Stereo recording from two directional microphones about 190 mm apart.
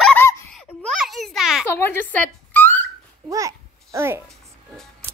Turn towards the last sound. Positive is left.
turn(degrees=-15)  # may be behind; listen again after turning